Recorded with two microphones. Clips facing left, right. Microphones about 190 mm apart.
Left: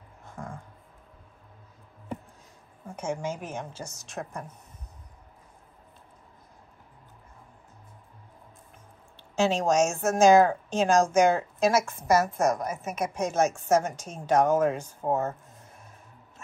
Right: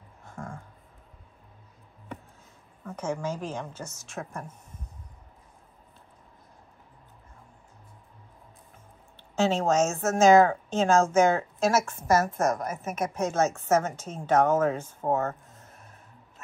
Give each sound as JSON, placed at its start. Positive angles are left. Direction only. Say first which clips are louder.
{"t": 2.9, "sound": "speech", "louder": "right 1 dB", "side_deg": 10}
{"t": 9.3, "sound": "speech", "louder": "even", "side_deg": 15}